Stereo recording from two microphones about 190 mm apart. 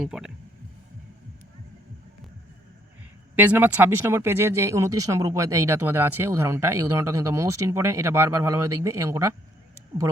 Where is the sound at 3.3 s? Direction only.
10° right (ahead or behind).